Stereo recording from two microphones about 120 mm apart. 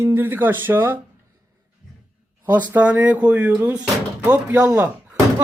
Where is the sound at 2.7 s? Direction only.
10° right (ahead or behind).